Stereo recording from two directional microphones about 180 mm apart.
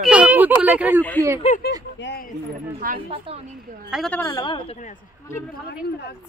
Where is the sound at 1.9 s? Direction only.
75° left (ahead or behind).